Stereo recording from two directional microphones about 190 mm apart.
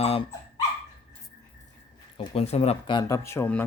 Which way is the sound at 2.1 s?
30° left (ahead or behind).